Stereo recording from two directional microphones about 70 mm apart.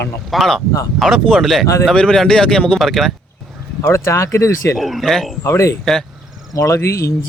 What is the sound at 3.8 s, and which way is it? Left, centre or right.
Speech, left.